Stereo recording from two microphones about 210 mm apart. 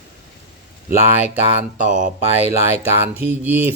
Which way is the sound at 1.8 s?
40° right (ahead or behind).